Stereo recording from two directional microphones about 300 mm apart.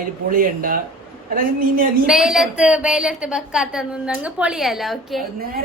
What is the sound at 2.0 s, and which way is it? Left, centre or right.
A woman's voice, centre.